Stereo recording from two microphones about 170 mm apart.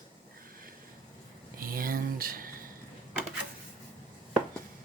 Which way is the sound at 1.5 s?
55° right (ahead or behind).